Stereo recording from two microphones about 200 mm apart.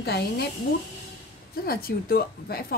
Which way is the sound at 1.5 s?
50° left (ahead or behind).